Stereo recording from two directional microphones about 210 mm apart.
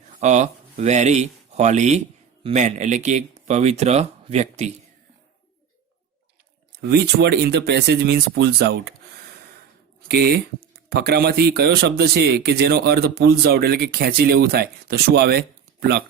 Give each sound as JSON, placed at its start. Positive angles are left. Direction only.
{"t": 0.1, "sound": "speech", "side_deg": -35}
{"t": 6.7, "sound": "speech", "side_deg": -50}
{"t": 10.1, "sound": "speech", "side_deg": -50}